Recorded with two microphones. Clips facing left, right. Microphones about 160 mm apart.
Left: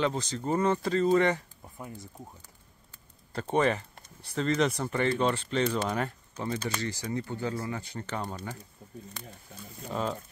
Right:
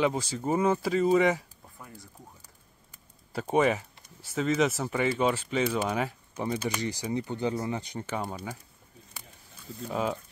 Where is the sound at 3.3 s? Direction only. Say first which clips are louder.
Right 2 dB; 5° right (ahead or behind).